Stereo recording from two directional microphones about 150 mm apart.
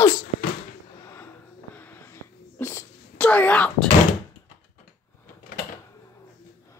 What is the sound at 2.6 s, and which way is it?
Wail, 10° left (ahead or behind).